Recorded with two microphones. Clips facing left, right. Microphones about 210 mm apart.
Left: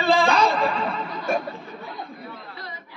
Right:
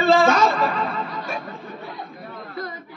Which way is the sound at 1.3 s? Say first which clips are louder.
Left 10 dB; 50° left (ahead or behind).